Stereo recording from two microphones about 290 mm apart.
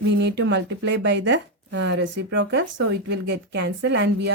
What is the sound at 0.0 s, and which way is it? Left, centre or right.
Speech, right.